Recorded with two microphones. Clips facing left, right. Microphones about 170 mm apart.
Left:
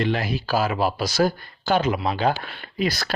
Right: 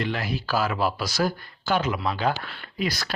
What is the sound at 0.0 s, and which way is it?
Speech, 20° left (ahead or behind).